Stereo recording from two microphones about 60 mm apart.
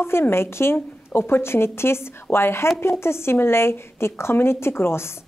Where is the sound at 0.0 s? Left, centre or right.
Left.